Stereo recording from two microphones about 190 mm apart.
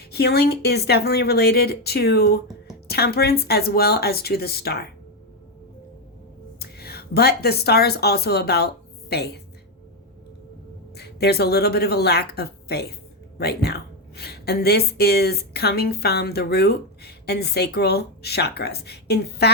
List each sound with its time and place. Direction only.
0.0 s a woman's voice: 60° left (ahead or behind)
6.6 s speech: 55° left (ahead or behind)
10.9 s a woman's voice: 60° left (ahead or behind)